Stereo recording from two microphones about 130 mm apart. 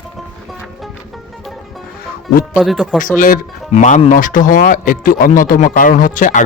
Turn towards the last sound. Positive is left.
turn(degrees=80)